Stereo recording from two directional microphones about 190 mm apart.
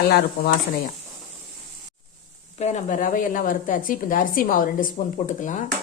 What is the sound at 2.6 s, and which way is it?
A woman's voice, 35° left (ahead or behind).